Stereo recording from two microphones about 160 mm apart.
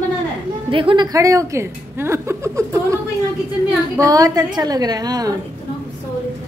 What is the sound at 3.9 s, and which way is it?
A woman's voice, 20° right (ahead or behind).